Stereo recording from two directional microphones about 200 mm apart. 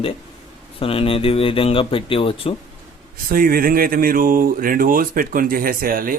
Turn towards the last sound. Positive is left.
turn(degrees=-45)  # may be behind; listen again after turning